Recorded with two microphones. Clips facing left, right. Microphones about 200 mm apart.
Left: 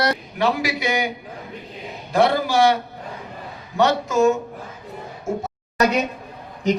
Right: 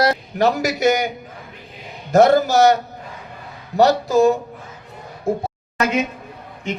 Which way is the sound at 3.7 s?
35° right (ahead or behind).